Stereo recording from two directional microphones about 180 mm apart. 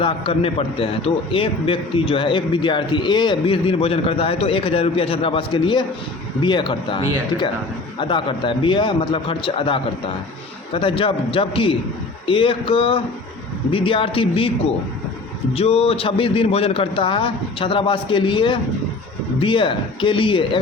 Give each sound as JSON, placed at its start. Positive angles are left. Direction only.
{"t": 0.0, "sound": "a man's voice", "side_deg": 30}
{"t": 15.5, "sound": "a man's voice", "side_deg": 35}